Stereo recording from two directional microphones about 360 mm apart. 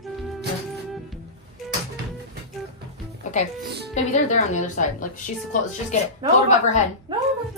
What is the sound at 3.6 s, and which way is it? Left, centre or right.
Speech, right.